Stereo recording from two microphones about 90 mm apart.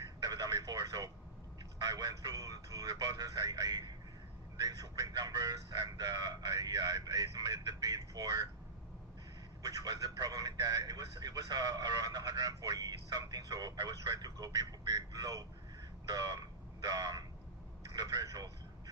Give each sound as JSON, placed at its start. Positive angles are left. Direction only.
{"t": 0.2, "sound": "telephone", "side_deg": -45}
{"t": 1.8, "sound": "speech", "side_deg": -45}
{"t": 9.6, "sound": "speech", "side_deg": -45}